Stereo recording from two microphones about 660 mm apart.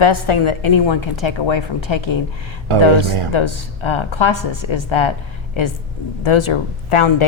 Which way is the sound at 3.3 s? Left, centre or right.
Left.